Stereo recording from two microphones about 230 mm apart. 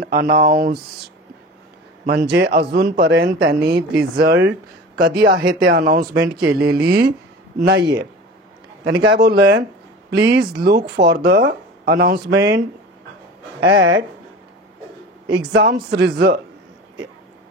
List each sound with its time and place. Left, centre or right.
0.0 s a man's voice: right
2.3 s a man's voice: right
13.6 s a man's voice: right
15.5 s a man's voice: right